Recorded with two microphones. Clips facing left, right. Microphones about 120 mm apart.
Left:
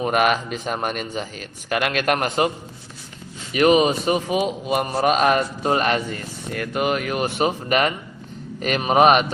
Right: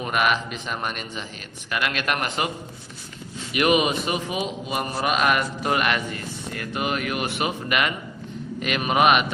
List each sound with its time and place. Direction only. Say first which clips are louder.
0.1 s a man's voice: left 1 dB; 45° left (ahead or behind)
3.5 s a man's voice: left 4 dB; 35° left (ahead or behind)
6.5 s a man's voice: left 5 dB; 50° left (ahead or behind)